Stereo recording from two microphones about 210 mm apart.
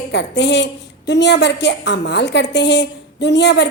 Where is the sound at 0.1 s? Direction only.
55° left (ahead or behind).